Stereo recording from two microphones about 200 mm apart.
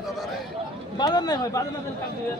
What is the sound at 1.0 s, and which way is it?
Speech, 20° left (ahead or behind).